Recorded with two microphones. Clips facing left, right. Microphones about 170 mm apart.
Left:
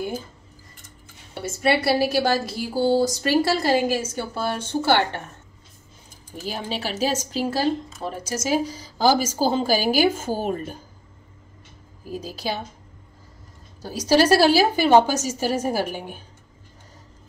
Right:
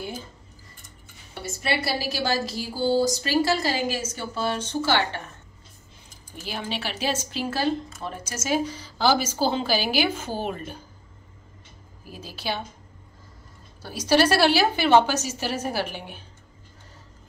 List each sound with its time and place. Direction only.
1.6 s a woman's voice: 55° left (ahead or behind)
6.4 s speech: 40° left (ahead or behind)
12.0 s speech: 40° left (ahead or behind)
13.8 s a woman's voice: 40° left (ahead or behind)